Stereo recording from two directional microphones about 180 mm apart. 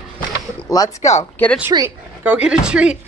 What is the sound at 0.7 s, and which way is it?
Speech, 20° left (ahead or behind).